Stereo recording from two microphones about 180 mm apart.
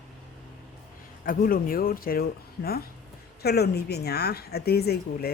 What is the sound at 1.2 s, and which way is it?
Speech, 50° left (ahead or behind).